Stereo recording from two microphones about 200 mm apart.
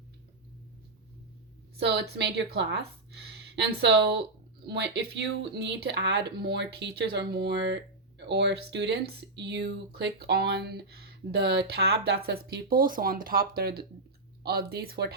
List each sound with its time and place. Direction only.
1.7 s speech: 60° right (ahead or behind)